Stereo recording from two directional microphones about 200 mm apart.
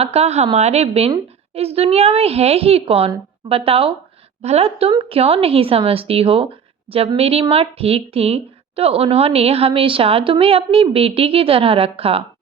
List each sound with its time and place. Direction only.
0.0 s a woman's voice: 30° right (ahead or behind)